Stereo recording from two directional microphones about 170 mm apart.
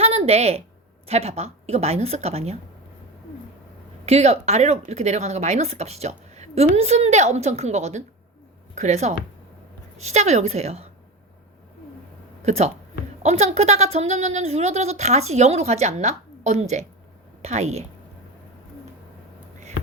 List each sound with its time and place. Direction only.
0.0 s a sound: 35° right (ahead or behind)
1.0 s speech: 35° right (ahead or behind)
4.0 s speech: 40° right (ahead or behind)
12.5 s speech: 40° right (ahead or behind)